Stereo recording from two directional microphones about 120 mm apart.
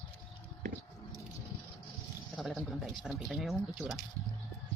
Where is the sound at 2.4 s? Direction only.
Centre (ahead or behind).